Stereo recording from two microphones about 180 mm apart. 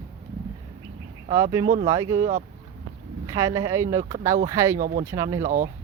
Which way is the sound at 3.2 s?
15° right (ahead or behind).